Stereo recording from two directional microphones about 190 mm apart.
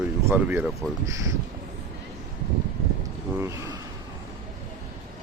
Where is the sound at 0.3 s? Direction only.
10° right (ahead or behind).